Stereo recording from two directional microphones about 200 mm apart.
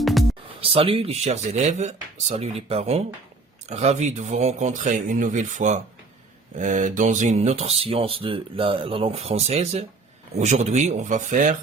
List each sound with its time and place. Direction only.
0.0 s music: centre (ahead or behind)
0.6 s speech: 30° right (ahead or behind)